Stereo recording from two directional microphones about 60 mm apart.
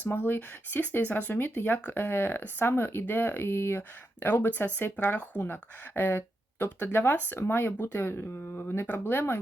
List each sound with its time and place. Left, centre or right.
0.0 s speech: left